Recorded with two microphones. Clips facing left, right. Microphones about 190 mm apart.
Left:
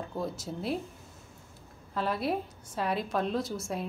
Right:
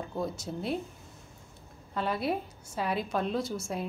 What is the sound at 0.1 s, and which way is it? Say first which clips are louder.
Speech: right 2 dB; centre (ahead or behind).